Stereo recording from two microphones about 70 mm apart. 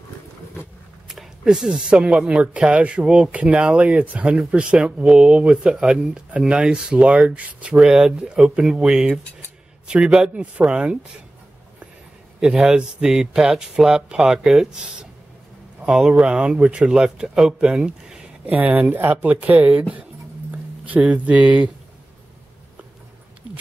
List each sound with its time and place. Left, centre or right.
1.0 s speech: centre
7.7 s speech: centre
12.4 s speech: centre
18.4 s speech: right